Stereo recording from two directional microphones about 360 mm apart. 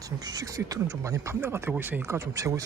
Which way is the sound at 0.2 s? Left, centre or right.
Centre.